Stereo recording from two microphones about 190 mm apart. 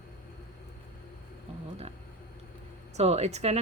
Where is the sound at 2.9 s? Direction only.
35° right (ahead or behind).